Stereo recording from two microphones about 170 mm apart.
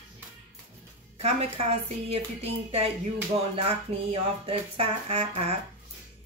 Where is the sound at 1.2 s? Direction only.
35° right (ahead or behind).